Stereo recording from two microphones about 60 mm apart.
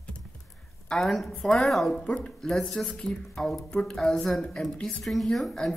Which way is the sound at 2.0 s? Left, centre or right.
Centre.